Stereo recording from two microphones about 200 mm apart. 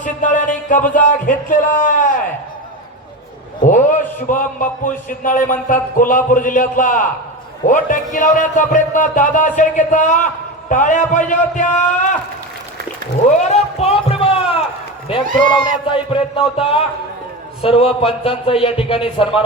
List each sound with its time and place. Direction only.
0.0 s music: 40° left (ahead or behind)
0.7 s a man's voice: 40° left (ahead or behind)
3.6 s a man's voice: 40° left (ahead or behind)
13.5 s a sound: 30° left (ahead or behind)
15.4 s a man's voice: 25° left (ahead or behind)